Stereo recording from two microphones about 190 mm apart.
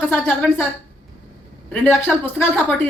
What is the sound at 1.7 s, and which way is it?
Speech, 5° left (ahead or behind).